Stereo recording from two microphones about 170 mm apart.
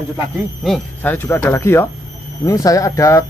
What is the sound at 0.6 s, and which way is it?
Speech, centre (ahead or behind).